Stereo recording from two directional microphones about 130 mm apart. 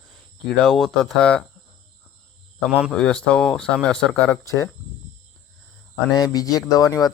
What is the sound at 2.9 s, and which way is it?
Speech, 5° left (ahead or behind).